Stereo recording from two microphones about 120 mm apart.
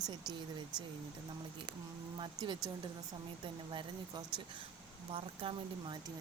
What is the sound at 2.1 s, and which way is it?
Speech, 45° right (ahead or behind).